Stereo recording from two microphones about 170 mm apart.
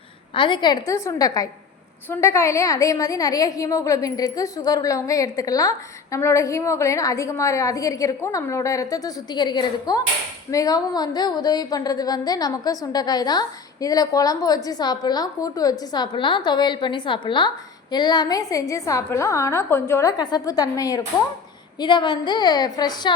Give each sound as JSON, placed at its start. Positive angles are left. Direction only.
{"t": 0.3, "sound": "a woman's voice", "side_deg": 30}